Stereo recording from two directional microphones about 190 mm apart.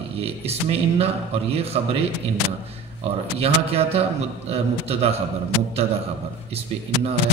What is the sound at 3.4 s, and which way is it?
A man's voice, 30° right (ahead or behind).